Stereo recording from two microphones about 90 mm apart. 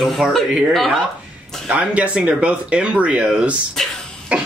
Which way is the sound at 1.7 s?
10° right (ahead or behind).